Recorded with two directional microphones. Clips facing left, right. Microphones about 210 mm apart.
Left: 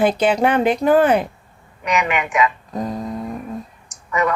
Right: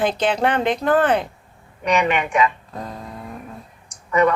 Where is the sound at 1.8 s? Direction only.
30° right (ahead or behind).